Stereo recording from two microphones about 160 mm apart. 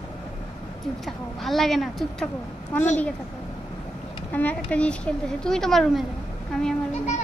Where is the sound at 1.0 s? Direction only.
Centre (ahead or behind).